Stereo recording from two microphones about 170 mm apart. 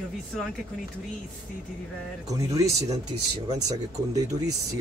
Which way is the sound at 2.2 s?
20° right (ahead or behind).